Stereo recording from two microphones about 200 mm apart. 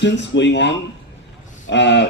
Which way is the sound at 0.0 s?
60° left (ahead or behind).